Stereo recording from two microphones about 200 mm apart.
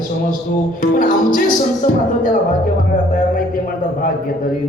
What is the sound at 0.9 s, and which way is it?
Speech, 45° left (ahead or behind).